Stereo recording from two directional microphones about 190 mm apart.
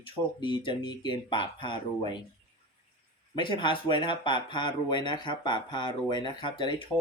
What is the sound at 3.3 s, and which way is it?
Speech, 25° left (ahead or behind).